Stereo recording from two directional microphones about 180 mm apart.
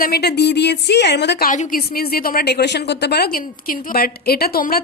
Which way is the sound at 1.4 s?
45° left (ahead or behind).